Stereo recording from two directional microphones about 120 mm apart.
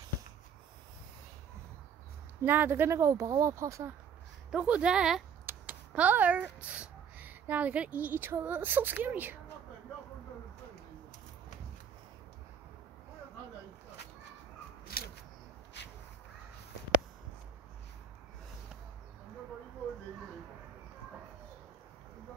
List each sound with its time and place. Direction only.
2.4 s speech: 15° right (ahead or behind)
4.5 s speech: 10° right (ahead or behind)